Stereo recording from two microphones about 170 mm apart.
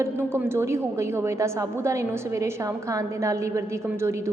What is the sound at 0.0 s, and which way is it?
A woman's voice, 15° right (ahead or behind).